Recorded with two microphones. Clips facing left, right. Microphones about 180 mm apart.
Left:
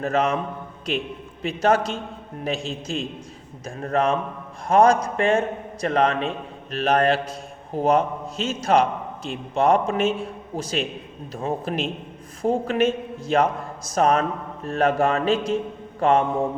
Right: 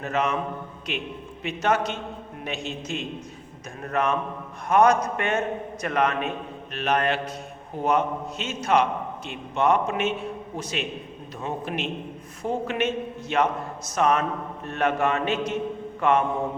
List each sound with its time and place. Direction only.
0.0 s a man's voice: 35° left (ahead or behind)